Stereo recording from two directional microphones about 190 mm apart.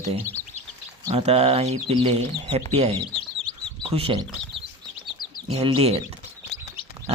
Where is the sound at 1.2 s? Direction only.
35° right (ahead or behind).